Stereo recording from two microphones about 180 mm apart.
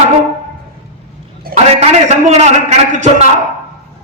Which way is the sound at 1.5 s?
55° right (ahead or behind).